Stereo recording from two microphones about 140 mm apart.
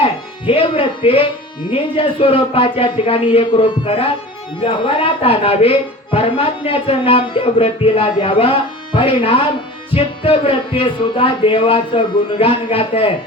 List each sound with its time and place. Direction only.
0.0 s music: 40° left (ahead or behind)
1.7 s speech: 40° left (ahead or behind)